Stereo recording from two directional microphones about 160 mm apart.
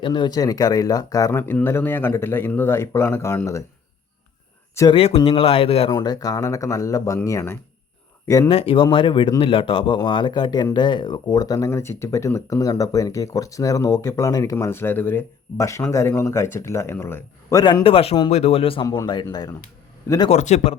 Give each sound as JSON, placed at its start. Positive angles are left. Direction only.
{"t": 0.0, "sound": "speech", "side_deg": 30}
{"t": 4.7, "sound": "speech", "side_deg": 20}
{"t": 4.9, "sound": "speech", "side_deg": 35}
{"t": 5.9, "sound": "speech", "side_deg": 25}
{"t": 8.4, "sound": "speech", "side_deg": 35}
{"t": 18.9, "sound": "speech", "side_deg": 25}
{"t": 20.3, "sound": "a man's voice", "side_deg": 45}